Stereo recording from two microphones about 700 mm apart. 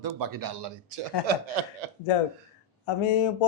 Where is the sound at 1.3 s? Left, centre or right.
Right.